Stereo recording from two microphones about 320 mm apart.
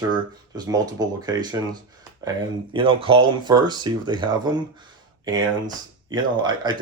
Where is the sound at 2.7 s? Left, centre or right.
Centre.